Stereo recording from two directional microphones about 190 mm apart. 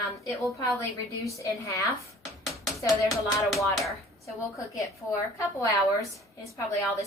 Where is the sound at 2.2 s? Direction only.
Centre (ahead or behind).